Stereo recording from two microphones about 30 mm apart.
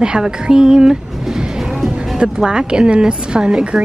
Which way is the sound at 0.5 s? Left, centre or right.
Right.